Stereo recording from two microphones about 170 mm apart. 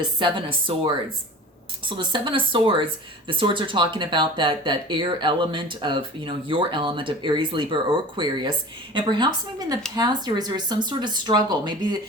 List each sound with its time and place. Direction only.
0.0 s speech: 30° right (ahead or behind)
1.9 s speech: 30° right (ahead or behind)